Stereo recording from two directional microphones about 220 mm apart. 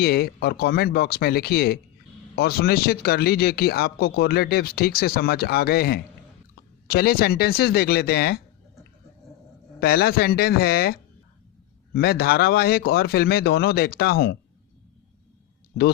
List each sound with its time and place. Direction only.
0.0 s speech: 45° left (ahead or behind)
9.8 s speech: 45° left (ahead or behind)